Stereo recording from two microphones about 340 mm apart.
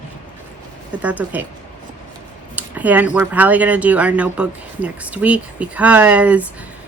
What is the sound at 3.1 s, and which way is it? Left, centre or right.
Speech, centre.